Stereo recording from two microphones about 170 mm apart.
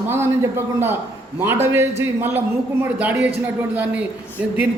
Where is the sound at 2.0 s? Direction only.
10° right (ahead or behind).